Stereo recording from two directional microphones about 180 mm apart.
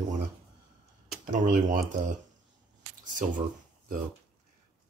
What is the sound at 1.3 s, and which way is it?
Speech, 50° right (ahead or behind).